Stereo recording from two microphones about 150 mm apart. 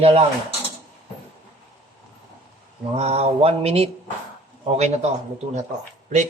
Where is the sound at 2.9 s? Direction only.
45° right (ahead or behind).